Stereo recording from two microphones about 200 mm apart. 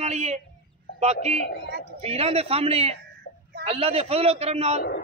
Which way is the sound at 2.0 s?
30° right (ahead or behind).